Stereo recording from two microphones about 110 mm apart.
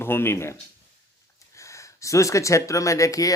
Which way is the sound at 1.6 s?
30° left (ahead or behind).